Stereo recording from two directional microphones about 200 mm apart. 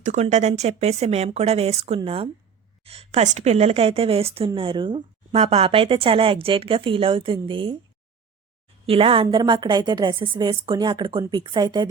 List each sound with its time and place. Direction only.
0.0 s speech: 35° right (ahead or behind)
8.9 s speech: 25° right (ahead or behind)